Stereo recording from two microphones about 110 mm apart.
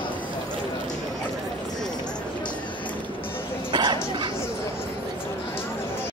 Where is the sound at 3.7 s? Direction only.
40° right (ahead or behind).